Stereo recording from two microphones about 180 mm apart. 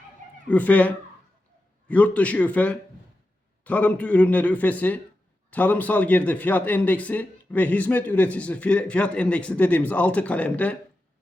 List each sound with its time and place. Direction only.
0.4 s speech: 10° left (ahead or behind)